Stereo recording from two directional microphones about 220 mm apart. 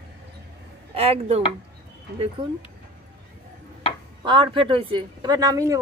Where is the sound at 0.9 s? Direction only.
25° right (ahead or behind).